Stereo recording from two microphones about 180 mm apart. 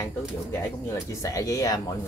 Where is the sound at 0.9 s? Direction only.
15° left (ahead or behind).